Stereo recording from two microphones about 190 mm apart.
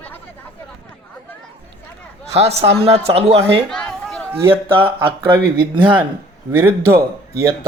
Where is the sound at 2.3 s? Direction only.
35° right (ahead or behind).